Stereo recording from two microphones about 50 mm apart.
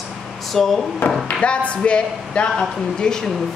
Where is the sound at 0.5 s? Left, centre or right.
Centre.